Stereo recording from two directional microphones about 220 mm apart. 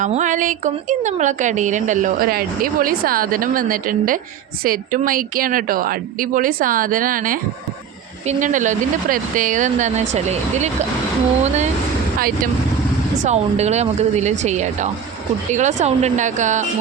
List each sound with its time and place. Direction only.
0.0 s a woman's voice: 35° right (ahead or behind)
13.2 s a woman's voice: 30° right (ahead or behind)